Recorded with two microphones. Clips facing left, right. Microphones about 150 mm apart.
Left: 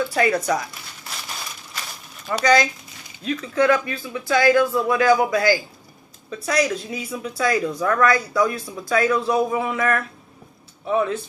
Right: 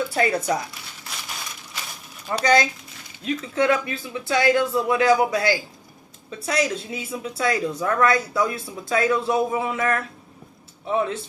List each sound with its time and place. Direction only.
0.2 s speech: 30° right (ahead or behind)
2.4 s speech: 30° right (ahead or behind)